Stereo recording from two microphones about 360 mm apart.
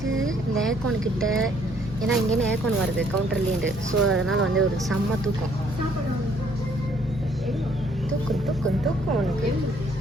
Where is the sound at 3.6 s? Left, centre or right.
Right.